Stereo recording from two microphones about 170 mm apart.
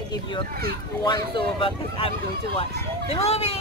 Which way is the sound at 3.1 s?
35° left (ahead or behind).